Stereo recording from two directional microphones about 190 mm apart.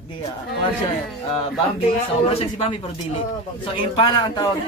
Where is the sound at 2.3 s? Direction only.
30° left (ahead or behind).